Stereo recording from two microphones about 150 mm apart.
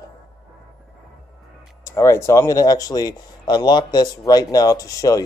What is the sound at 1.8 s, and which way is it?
Speech, 20° left (ahead or behind).